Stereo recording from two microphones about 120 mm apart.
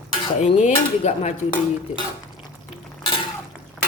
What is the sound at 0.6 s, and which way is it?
Speech, 70° left (ahead or behind).